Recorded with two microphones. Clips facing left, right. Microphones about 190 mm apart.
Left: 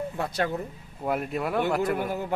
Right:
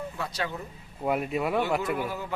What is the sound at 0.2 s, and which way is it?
Speech, 50° left (ahead or behind).